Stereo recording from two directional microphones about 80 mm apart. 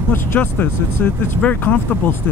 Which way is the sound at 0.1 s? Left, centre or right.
Left.